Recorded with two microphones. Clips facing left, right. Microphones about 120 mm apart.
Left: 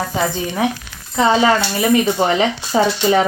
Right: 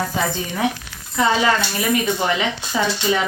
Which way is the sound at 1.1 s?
25° left (ahead or behind).